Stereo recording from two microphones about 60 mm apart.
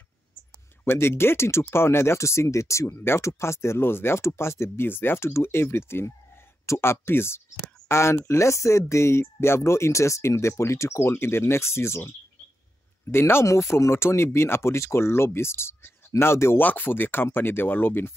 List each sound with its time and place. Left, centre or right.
0.8 s speech: left
13.1 s speech: left